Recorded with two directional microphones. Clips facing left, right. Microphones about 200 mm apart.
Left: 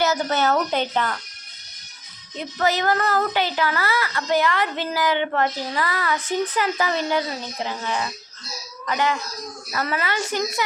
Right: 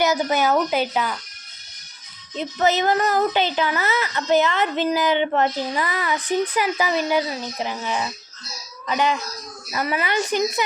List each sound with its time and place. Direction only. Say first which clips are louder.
0.0 s speech: right 1 dB; 15° right (ahead or behind)
2.6 s a woman's voice: right 2 dB; 20° right (ahead or behind)